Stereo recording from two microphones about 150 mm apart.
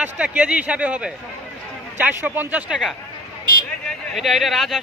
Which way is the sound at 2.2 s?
10° right (ahead or behind).